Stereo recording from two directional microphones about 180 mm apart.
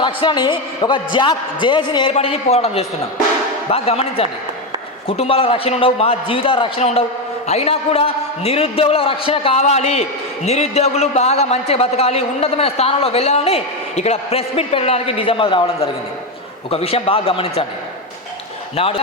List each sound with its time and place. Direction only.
0.0 s a man's voice: 25° left (ahead or behind)
18.8 s a man's voice: 30° left (ahead or behind)